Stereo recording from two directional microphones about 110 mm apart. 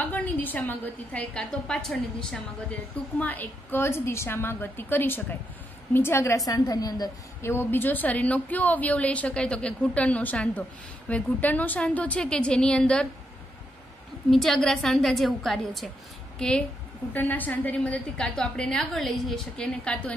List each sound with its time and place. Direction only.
0.0 s a woman's voice: 15° left (ahead or behind)
3.2 s a woman's voice: 15° left (ahead or behind); by 7.1 s 35° left (ahead or behind)
7.4 s a woman's voice: 20° left (ahead or behind)
14.3 s a woman's voice: centre (ahead or behind)